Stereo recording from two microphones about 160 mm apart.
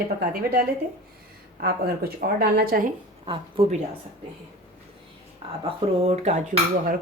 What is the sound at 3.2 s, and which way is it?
Speech, 35° right (ahead or behind).